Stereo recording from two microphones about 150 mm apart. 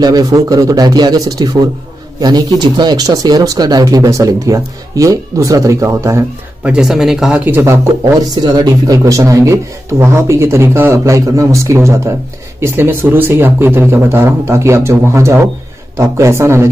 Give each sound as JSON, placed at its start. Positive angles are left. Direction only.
{"t": 0.0, "sound": "speech", "side_deg": -25}
{"t": 6.6, "sound": "speech", "side_deg": -5}